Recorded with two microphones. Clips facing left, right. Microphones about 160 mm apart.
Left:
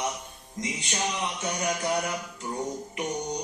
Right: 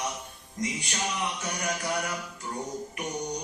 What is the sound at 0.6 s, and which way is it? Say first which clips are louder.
Mantra: right 1 dB; 20° left (ahead or behind).